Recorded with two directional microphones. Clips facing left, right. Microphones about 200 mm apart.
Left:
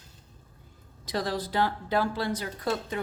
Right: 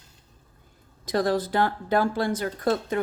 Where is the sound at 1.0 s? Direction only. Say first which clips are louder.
Right 7 dB; 50° right (ahead or behind).